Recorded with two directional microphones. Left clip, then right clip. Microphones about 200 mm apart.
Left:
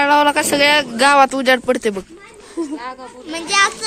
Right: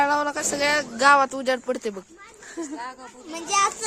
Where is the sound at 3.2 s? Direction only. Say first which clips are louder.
Left 7 dB; 40° right (ahead or behind).